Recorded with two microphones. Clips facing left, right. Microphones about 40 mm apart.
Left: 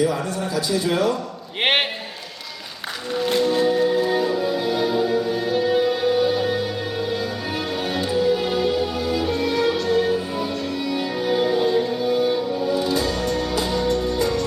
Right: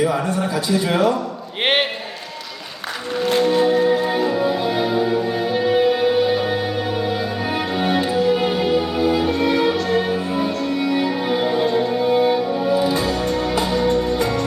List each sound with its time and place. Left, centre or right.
0.0 s a man's voice: right
1.6 s a man's voice: centre
3.3 s music: right
11.9 s music: right
13.2 s music: centre
13.8 s music: right